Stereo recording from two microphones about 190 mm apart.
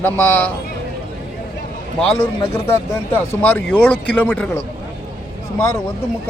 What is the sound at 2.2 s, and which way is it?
Speech, 10° left (ahead or behind).